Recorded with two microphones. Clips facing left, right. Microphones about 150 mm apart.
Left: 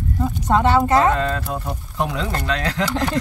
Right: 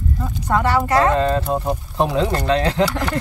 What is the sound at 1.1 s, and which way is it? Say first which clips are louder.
Speech: right 5 dB; 25° right (ahead or behind).